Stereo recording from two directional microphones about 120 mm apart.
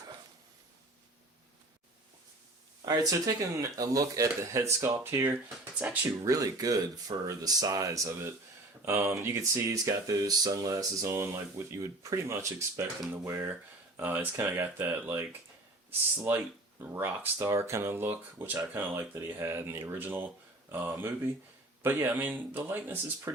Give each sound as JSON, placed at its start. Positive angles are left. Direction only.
{"t": 2.8, "sound": "speech", "side_deg": -30}
{"t": 7.1, "sound": "speech", "side_deg": -45}
{"t": 7.4, "sound": "speech", "side_deg": -30}